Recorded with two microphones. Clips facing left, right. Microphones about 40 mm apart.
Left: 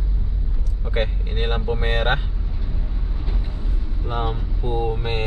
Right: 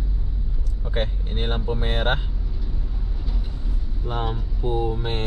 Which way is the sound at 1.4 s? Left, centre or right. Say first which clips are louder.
Left 3 dB; left.